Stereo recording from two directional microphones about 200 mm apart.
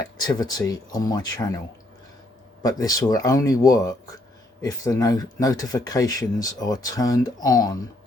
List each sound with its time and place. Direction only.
0.2 s speech: 20° left (ahead or behind)